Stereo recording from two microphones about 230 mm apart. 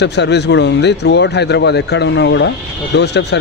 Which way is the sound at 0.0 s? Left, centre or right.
Left.